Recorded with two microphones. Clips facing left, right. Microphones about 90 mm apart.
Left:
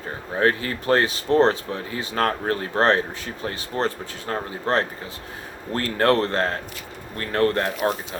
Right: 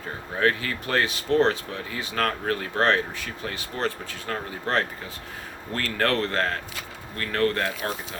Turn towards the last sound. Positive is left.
turn(degrees=30)  # may be behind; listen again after turning